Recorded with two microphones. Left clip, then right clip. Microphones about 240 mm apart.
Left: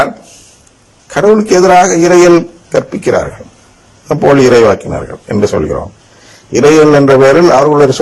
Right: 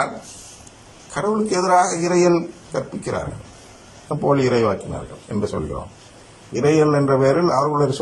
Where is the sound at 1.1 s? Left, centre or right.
Left.